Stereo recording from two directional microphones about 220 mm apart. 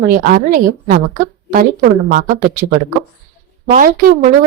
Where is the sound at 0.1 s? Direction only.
40° right (ahead or behind).